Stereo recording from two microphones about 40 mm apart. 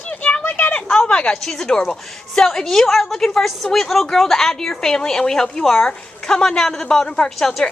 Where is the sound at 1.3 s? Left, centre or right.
Centre.